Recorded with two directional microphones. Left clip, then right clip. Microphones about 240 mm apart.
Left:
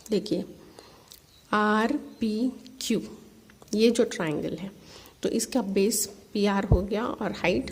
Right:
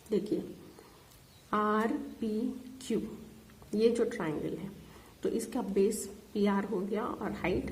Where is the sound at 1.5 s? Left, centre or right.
Left.